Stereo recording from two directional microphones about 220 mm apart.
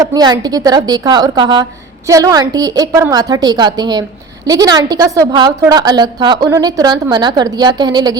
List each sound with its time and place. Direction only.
0.0 s a woman's voice: 15° right (ahead or behind)